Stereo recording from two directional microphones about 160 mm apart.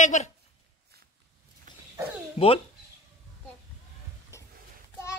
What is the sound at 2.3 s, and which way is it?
Speech, 35° left (ahead or behind).